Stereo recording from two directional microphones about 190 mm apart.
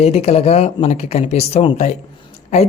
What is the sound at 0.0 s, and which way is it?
A woman's voice, 35° left (ahead or behind).